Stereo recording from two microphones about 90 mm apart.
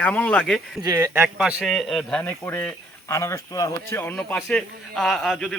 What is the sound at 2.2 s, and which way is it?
Speech, 25° left (ahead or behind).